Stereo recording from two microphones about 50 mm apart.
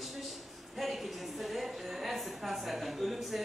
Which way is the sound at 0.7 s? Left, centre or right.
Centre.